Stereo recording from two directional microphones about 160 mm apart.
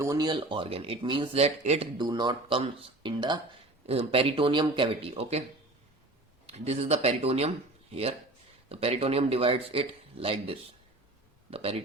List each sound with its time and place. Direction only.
0.0 s a man's voice: 25° right (ahead or behind); by 1.9 s 40° right (ahead or behind)
2.0 s a man's voice: 25° right (ahead or behind)
6.5 s a man's voice: 40° right (ahead or behind)